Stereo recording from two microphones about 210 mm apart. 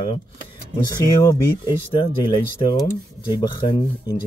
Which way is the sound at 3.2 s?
20° left (ahead or behind).